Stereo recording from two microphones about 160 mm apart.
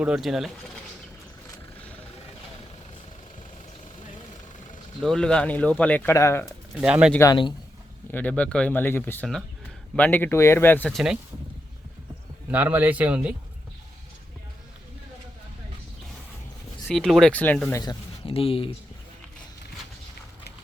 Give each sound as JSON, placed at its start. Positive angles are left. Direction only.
{"t": 0.0, "sound": "speech", "side_deg": -5}
{"t": 5.0, "sound": "speech", "side_deg": 5}
{"t": 6.4, "sound": "speech", "side_deg": -5}
{"t": 7.1, "sound": "speech", "side_deg": 15}
{"t": 10.9, "sound": "speech", "side_deg": -5}
{"t": 12.5, "sound": "a man's voice", "side_deg": -10}
{"t": 16.8, "sound": "speech", "side_deg": 0}
{"t": 17.7, "sound": "speech", "side_deg": 30}